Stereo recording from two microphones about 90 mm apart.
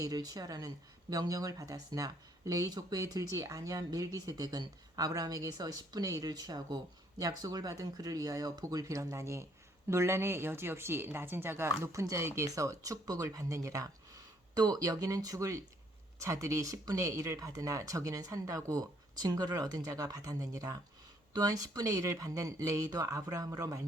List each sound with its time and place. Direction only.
0.0 s speech: 45° right (ahead or behind)